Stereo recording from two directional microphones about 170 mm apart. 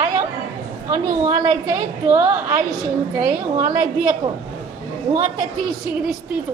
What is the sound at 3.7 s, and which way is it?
Speech, 25° right (ahead or behind).